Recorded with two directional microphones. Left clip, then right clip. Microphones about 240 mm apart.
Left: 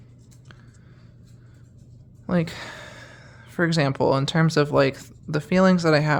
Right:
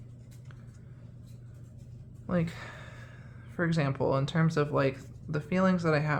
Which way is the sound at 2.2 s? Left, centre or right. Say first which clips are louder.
Left 7 dB; left.